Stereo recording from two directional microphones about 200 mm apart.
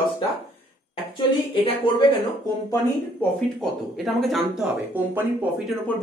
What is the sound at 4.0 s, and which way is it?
Speech, centre (ahead or behind).